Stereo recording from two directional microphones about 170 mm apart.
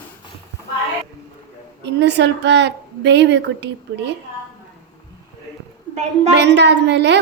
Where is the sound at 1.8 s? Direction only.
90° right.